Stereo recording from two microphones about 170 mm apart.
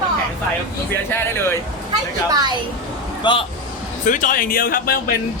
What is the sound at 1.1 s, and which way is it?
Speech, 15° left (ahead or behind).